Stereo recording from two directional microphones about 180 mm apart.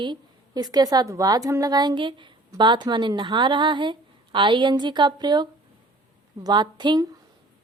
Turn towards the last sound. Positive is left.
turn(degrees=-25)  # may be behind; listen again after turning